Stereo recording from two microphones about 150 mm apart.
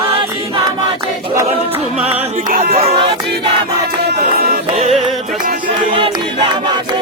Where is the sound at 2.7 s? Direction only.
40° right (ahead or behind).